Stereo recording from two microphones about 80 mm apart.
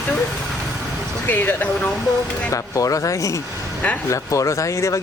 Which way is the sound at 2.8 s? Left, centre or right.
Left.